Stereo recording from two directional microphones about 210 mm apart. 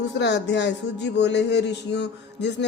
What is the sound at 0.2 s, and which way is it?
Speech, 55° left (ahead or behind).